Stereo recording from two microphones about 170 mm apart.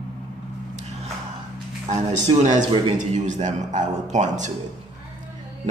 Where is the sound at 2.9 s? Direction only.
45° right (ahead or behind).